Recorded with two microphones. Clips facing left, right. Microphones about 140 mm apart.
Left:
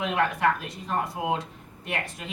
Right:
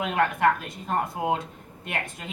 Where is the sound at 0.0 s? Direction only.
50° right (ahead or behind).